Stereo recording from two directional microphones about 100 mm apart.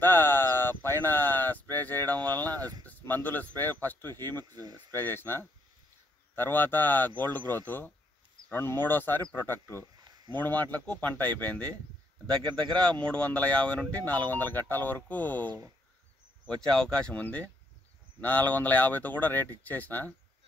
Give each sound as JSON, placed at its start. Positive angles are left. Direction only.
{"t": 0.0, "sound": "a sound", "side_deg": 20}
{"t": 2.8, "sound": "speech", "side_deg": 15}
{"t": 4.6, "sound": "speech", "side_deg": -40}
{"t": 4.9, "sound": "speech", "side_deg": 20}
{"t": 12.8, "sound": "speech", "side_deg": 10}
{"t": 16.6, "sound": "speech", "side_deg": 10}